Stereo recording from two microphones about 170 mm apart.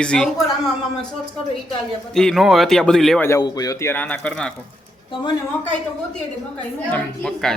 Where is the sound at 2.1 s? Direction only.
Centre (ahead or behind).